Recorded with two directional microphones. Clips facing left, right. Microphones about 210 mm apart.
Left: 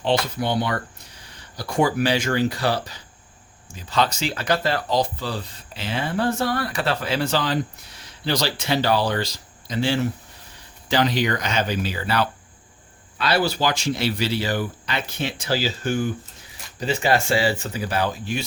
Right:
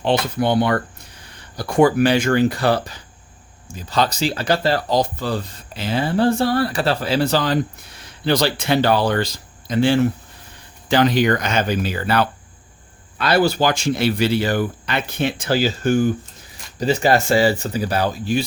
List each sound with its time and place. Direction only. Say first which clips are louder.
0.0 s speech: right 3 dB; 55° right (ahead or behind)
3.8 s speech: right 3 dB; 40° right (ahead or behind)